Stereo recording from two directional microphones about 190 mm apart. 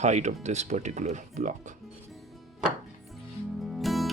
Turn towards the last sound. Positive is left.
turn(degrees=0)  # may be behind; listen again after turning